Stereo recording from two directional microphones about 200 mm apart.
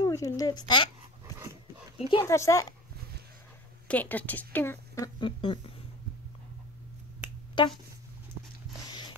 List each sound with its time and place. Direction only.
0.0 s speech: 15° left (ahead or behind)
1.2 s dog: 15° right (ahead or behind)
2.0 s speech: 25° left (ahead or behind)
2.2 s speech: 15° left (ahead or behind)
3.8 s speech: 5° left (ahead or behind); by 5.6 s 25° left (ahead or behind)
7.6 s speech: 25° left (ahead or behind)